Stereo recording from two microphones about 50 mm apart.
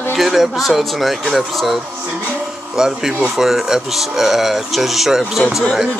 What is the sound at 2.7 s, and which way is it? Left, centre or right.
Speech, centre.